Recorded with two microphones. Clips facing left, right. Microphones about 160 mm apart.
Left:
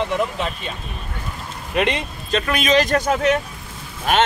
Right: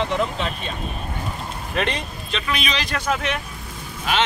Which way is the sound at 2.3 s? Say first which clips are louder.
Left 8 dB; 45° left (ahead or behind).